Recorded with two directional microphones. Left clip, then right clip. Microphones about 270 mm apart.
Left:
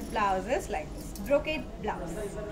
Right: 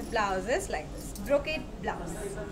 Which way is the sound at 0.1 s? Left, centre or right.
Centre.